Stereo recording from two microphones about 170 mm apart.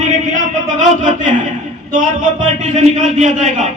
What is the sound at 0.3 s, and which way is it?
Speech, 45° right (ahead or behind).